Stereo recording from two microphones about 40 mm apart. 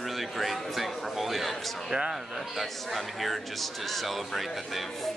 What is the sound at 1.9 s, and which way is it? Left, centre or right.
Speech, centre.